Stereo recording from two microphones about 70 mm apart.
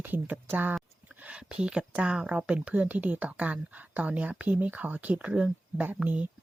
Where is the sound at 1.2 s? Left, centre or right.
Centre.